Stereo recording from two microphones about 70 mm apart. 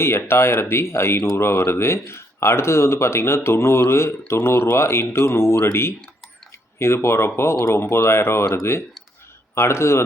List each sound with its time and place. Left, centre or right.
0.3 s speech: left